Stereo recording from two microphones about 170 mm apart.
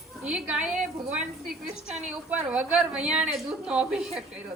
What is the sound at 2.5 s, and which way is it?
A woman's voice, 5° right (ahead or behind).